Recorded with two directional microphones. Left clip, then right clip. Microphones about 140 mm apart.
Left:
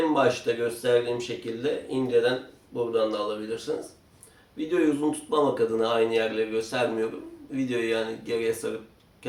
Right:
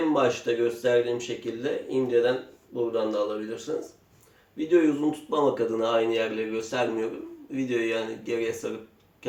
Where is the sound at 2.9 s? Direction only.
15° left (ahead or behind).